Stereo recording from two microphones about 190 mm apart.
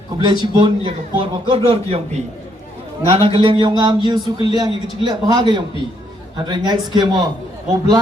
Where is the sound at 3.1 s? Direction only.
30° right (ahead or behind).